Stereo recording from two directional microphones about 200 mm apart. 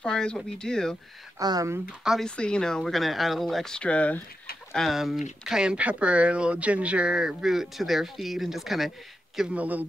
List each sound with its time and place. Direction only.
0.0 s speech: 5° left (ahead or behind)
1.4 s speech: 20° right (ahead or behind)
2.0 s speech: 5° left (ahead or behind)